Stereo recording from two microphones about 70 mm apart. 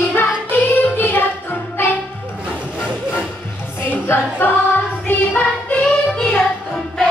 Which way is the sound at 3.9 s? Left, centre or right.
Left.